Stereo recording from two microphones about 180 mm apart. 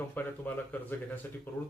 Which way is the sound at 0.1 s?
10° left (ahead or behind).